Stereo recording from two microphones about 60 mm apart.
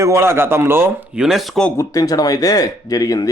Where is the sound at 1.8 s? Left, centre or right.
Left.